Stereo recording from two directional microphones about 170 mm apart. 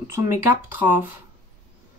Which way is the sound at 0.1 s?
15° right (ahead or behind).